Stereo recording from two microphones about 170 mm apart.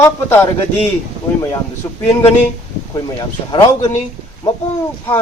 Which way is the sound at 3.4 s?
25° left (ahead or behind).